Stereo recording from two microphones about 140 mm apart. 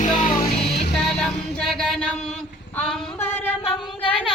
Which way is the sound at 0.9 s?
5° left (ahead or behind).